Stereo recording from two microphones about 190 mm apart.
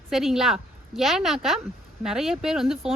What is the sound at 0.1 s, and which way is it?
A woman's voice, centre (ahead or behind).